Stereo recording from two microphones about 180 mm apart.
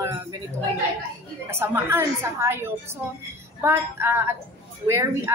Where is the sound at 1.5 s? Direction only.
15° right (ahead or behind).